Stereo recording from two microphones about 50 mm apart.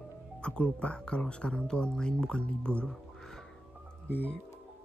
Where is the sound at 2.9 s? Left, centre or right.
Centre.